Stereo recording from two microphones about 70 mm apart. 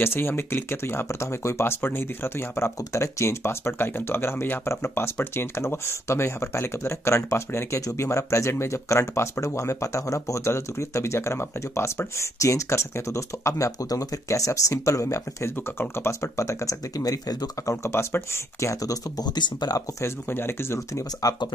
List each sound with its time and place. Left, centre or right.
0.0 s speech: left
17.8 s speech: left
20.0 s speech: left
21.2 s speech: left